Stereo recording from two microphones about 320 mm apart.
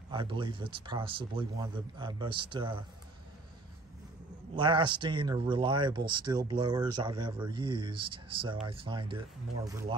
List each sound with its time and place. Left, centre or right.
0.1 s speech: centre
4.6 s speech: centre